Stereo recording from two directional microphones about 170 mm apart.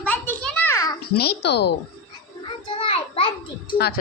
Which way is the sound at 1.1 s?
70° left (ahead or behind).